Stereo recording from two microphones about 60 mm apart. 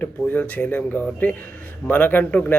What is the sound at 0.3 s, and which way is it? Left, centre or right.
A man's voice, left.